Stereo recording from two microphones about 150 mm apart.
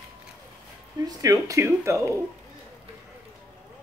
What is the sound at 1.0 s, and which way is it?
Speech, 25° right (ahead or behind).